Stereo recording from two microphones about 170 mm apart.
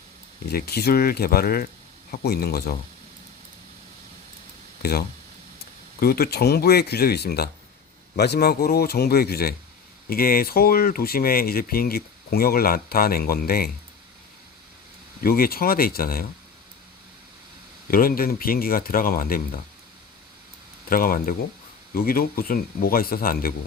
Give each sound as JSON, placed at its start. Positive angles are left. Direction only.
{"t": 0.5, "sound": "speech", "side_deg": 65}
{"t": 4.8, "sound": "speech", "side_deg": 65}
{"t": 15.2, "sound": "speech", "side_deg": 60}
{"t": 17.9, "sound": "speech", "side_deg": 60}
{"t": 20.9, "sound": "speech", "side_deg": 55}